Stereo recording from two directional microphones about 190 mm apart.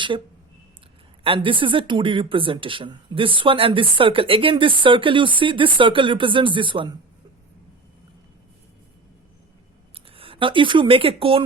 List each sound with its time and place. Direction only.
1.2 s speech: 25° right (ahead or behind)
10.2 s speech: 30° right (ahead or behind)